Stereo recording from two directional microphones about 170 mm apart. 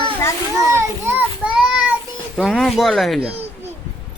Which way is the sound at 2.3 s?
Centre (ahead or behind).